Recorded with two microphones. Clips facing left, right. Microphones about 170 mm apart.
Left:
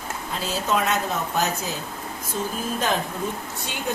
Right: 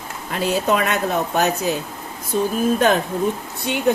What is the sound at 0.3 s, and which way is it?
Speech, 65° right (ahead or behind).